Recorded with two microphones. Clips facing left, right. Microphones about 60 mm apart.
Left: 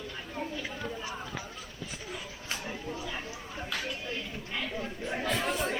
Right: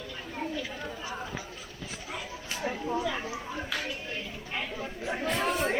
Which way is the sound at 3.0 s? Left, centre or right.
Right.